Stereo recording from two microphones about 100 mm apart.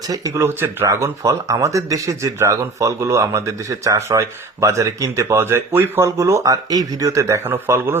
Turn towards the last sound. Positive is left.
turn(degrees=-25)  # may be behind; listen again after turning